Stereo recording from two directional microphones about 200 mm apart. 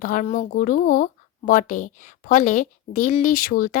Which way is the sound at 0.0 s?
40° left (ahead or behind).